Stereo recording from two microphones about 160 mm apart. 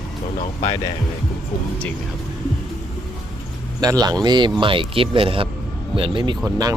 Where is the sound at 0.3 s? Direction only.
30° left (ahead or behind).